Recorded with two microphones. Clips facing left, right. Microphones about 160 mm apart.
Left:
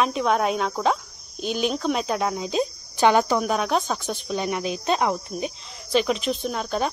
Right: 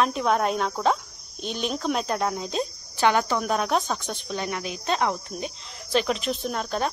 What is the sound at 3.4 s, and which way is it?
Speech, centre (ahead or behind).